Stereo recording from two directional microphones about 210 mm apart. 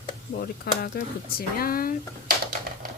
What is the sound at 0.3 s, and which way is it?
Speech, 45° left (ahead or behind).